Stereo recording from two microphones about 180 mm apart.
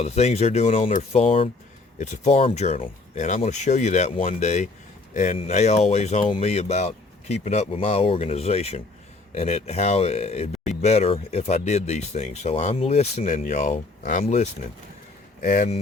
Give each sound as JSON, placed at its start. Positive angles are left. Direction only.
{"t": 0.0, "sound": "speech", "side_deg": 40}